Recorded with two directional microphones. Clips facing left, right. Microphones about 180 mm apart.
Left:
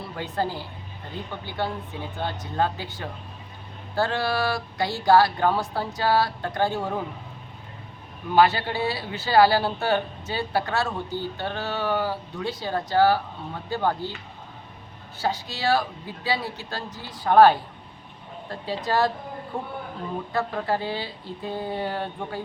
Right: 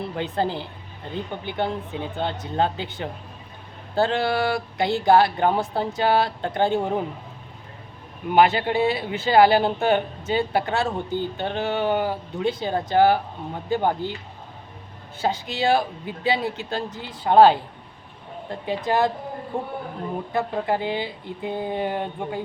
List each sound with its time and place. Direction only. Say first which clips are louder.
0.0 s speech: right 3 dB; 20° right (ahead or behind)
8.3 s speech: right 2 dB; 20° right (ahead or behind)
15.2 s speech: right 3 dB; 20° right (ahead or behind)